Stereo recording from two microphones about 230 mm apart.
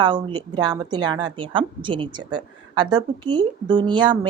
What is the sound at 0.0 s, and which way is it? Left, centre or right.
A woman's voice, centre.